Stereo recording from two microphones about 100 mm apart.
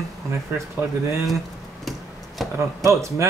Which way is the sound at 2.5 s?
30° right (ahead or behind).